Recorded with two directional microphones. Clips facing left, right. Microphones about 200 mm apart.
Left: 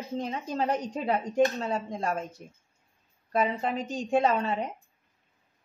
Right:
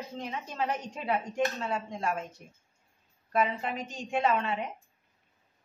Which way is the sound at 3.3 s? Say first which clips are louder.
Left 2 dB; 35° left (ahead or behind).